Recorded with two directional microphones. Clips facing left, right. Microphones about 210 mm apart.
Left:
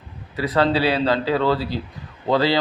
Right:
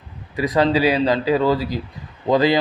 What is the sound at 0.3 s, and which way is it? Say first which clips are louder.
Speech: right 2 dB; 15° right (ahead or behind).